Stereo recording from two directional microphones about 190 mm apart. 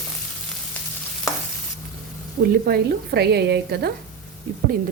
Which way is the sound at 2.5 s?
55° right (ahead or behind).